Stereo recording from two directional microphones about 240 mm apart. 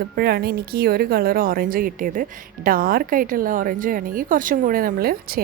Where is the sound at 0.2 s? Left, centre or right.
Right.